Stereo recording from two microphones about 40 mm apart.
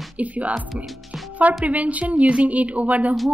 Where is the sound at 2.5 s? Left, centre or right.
Right.